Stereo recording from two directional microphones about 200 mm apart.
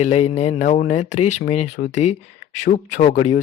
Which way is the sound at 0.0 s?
30° left (ahead or behind).